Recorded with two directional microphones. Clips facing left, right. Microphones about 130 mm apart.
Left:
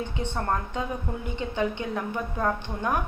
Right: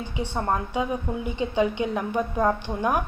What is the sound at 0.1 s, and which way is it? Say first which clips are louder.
A woman's voice: right 2 dB; 10° right (ahead or behind).